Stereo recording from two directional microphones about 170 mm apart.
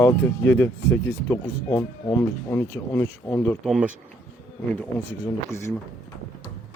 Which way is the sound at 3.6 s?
Centre (ahead or behind).